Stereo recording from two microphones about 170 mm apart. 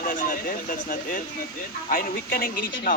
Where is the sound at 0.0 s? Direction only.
55° left (ahead or behind).